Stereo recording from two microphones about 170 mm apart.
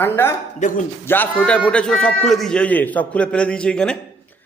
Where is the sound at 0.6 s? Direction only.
45° left (ahead or behind).